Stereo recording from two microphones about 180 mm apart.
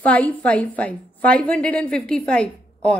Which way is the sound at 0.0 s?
10° left (ahead or behind).